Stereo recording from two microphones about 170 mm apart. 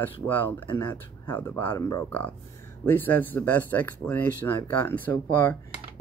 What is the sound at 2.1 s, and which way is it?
Speech, 10° left (ahead or behind).